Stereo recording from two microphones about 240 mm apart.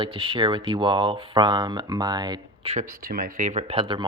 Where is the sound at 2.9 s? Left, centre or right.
Right.